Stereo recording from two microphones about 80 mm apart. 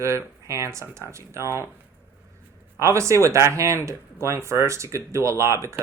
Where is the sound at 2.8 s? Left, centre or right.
Right.